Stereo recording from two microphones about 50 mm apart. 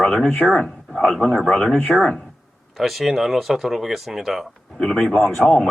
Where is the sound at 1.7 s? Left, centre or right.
Centre.